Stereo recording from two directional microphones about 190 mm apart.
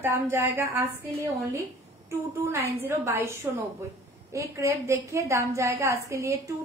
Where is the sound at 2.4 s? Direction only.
15° right (ahead or behind).